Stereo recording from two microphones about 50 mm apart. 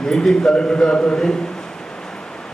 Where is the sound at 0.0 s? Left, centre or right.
Centre.